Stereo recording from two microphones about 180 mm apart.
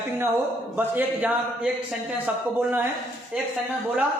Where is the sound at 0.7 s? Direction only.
10° right (ahead or behind).